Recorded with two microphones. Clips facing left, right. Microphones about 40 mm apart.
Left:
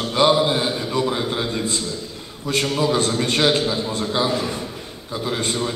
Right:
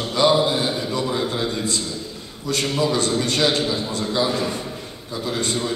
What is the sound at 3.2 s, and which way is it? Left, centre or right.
A man's voice, left.